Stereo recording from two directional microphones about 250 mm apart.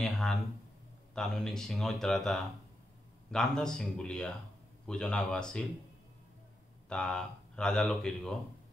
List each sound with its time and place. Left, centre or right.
0.0 s speech: centre
6.9 s speech: centre